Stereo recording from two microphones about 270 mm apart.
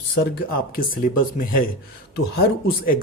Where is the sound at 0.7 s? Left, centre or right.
Left.